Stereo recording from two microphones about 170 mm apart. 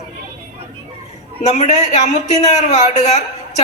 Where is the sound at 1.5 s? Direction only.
45° left (ahead or behind).